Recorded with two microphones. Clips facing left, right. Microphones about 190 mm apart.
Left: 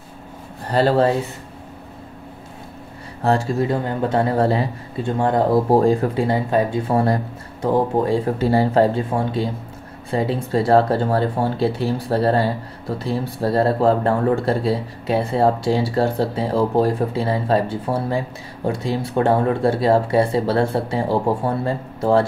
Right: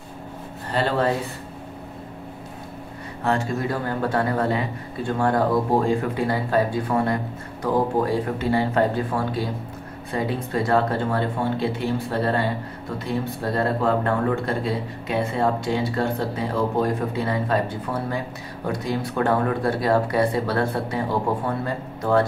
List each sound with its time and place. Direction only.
0.7 s speech: 40° left (ahead or behind)
3.3 s speech: 30° left (ahead or behind)
5.7 s speech: 35° left (ahead or behind)
6.2 s speech: 25° left (ahead or behind)
8.5 s speech: 40° left (ahead or behind)
8.9 s speech: 25° left (ahead or behind)